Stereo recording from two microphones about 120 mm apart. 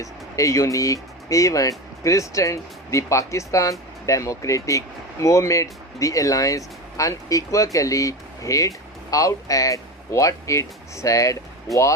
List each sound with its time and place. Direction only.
0.0 s speech: 25° left (ahead or behind)